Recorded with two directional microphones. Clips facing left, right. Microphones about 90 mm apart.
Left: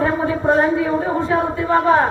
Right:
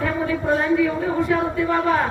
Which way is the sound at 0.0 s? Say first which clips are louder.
Left 4 dB; 30° left (ahead or behind).